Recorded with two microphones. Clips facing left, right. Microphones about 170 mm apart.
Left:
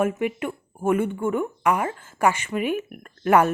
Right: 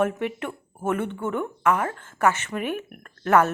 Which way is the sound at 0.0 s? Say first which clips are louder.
Left 1 dB; 10° left (ahead or behind).